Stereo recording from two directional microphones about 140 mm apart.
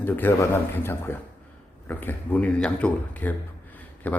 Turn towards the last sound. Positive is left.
turn(degrees=10)  # may be behind; listen again after turning